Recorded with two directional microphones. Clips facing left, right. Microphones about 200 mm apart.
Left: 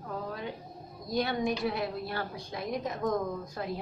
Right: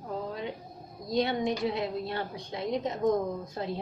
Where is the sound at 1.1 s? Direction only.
20° right (ahead or behind).